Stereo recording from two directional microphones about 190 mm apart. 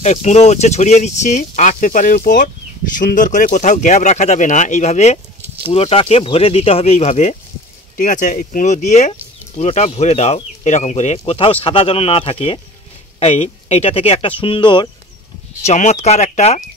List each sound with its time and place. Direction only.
0.0 s speech: 35° left (ahead or behind)
15.6 s speech: 35° left (ahead or behind)